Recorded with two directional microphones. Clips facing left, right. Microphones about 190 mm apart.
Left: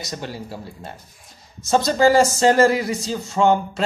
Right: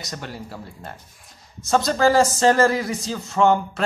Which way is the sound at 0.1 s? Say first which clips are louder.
Left 2 dB; 25° left (ahead or behind).